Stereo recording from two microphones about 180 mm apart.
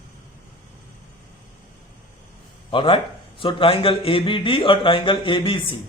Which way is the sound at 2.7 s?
30° left (ahead or behind).